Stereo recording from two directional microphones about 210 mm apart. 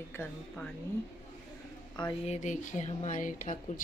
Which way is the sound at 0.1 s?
10° left (ahead or behind).